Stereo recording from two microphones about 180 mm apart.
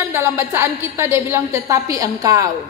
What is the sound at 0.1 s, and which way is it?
A woman's voice, 15° right (ahead or behind).